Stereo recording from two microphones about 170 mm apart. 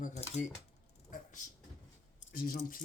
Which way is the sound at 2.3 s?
60° left (ahead or behind).